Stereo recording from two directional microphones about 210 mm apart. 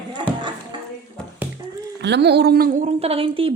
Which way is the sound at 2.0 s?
55° right (ahead or behind).